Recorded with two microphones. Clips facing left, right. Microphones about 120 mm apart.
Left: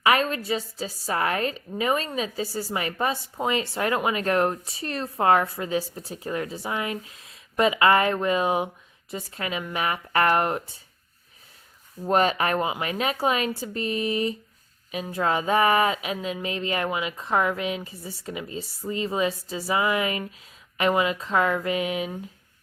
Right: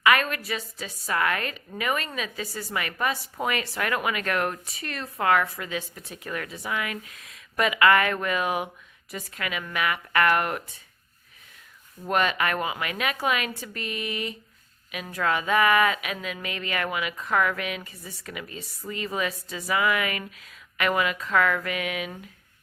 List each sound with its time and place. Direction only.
0.0 s a woman's voice: 30° left (ahead or behind)
12.0 s a woman's voice: 30° left (ahead or behind)